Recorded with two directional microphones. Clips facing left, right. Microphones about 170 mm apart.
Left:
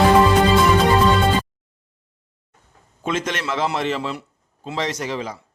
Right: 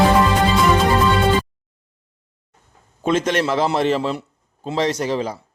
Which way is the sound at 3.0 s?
35° right (ahead or behind).